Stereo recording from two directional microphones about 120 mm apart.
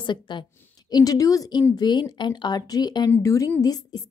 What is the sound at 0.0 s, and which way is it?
A woman's voice, 40° left (ahead or behind).